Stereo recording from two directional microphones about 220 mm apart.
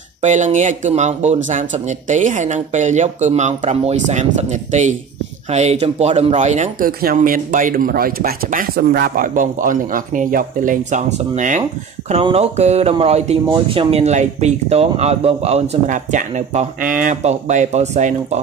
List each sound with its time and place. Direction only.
0.2 s speech: 35° right (ahead or behind)